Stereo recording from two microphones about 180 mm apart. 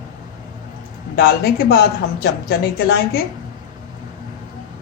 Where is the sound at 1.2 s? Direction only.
60° left (ahead or behind).